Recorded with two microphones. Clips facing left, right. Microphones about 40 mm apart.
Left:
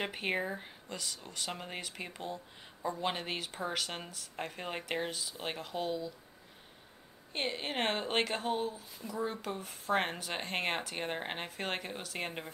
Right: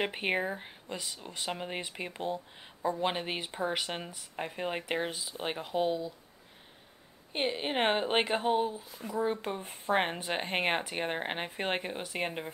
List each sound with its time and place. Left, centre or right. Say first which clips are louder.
0.0 s speech: right 4 dB; centre
7.3 s speech: right 4 dB; centre